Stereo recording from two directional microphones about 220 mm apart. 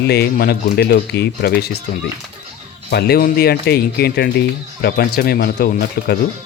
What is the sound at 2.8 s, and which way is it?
Speech, 45° left (ahead or behind).